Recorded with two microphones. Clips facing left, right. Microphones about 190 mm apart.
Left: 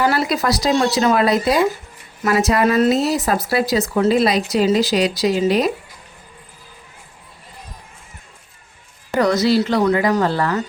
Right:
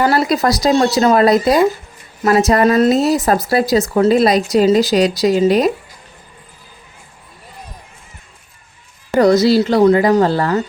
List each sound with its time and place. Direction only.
0.0 s speech: 40° right (ahead or behind)
9.1 s speech: 30° right (ahead or behind)